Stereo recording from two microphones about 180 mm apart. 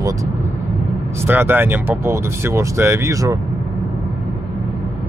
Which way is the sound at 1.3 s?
10° right (ahead or behind).